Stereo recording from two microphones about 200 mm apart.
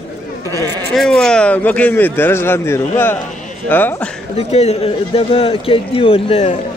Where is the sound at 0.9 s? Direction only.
Centre (ahead or behind).